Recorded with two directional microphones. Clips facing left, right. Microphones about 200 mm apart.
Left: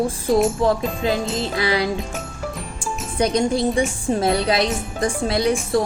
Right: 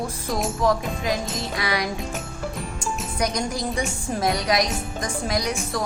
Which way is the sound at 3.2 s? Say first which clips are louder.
Left 8 dB; 30° left (ahead or behind).